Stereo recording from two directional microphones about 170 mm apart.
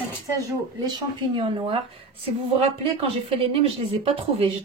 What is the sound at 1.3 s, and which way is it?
Speech, 30° right (ahead or behind).